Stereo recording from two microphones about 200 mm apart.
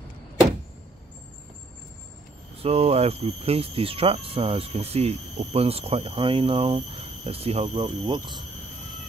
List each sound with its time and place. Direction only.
2.6 s speech: 30° right (ahead or behind)